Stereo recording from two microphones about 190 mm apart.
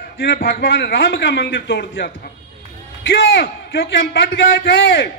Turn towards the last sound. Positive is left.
turn(degrees=70)  # may be behind; listen again after turning